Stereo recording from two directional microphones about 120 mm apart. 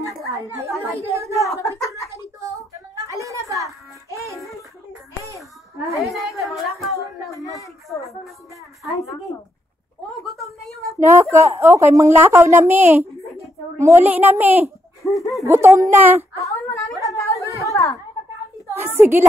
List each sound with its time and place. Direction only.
1.3 s speech: 25° left (ahead or behind)
3.2 s a sound: 25° right (ahead or behind)
4.1 s music: 25° right (ahead or behind)
6.0 s a woman's voice: centre (ahead or behind)
7.5 s a sound: 25° left (ahead or behind)
11.0 s a woman's voice: 20° right (ahead or behind)
15.0 s speech: 25° left (ahead or behind)
15.4 s a woman's voice: 20° right (ahead or behind)
16.3 s speech: 25° left (ahead or behind)
17.0 s a sound: 25° left (ahead or behind)
18.8 s a woman's voice: 20° right (ahead or behind)